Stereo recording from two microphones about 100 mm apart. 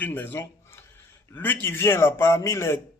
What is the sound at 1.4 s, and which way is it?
Speech, 20° left (ahead or behind).